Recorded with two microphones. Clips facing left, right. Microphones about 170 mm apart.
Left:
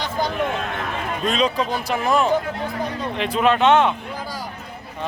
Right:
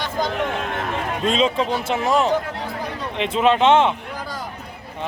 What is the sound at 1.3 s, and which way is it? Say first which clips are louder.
A man's voice: right 2 dB; 25° right (ahead or behind).